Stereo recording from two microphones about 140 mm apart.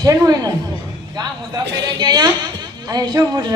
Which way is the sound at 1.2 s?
30° right (ahead or behind).